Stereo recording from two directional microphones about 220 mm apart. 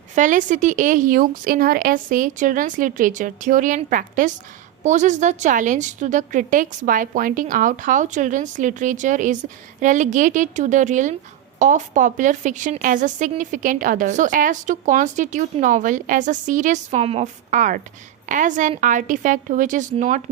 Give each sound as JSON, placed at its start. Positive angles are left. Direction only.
{"t": 0.1, "sound": "a woman's voice", "side_deg": -35}